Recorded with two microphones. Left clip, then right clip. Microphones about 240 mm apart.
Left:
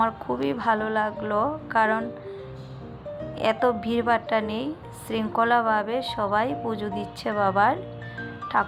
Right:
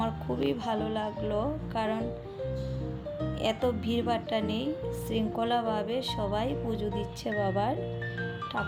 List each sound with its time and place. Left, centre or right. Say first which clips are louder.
0.3 s a woman's voice: left 6 dB; centre
3.4 s a woman's voice: left 8 dB; centre
7.3 s speech: left 7 dB; left
7.5 s a woman's voice: left 9 dB; centre